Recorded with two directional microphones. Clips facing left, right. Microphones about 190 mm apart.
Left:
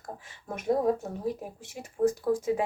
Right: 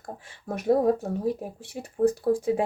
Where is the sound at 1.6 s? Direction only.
35° right (ahead or behind).